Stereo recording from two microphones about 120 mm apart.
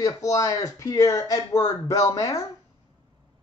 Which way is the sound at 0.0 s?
25° left (ahead or behind).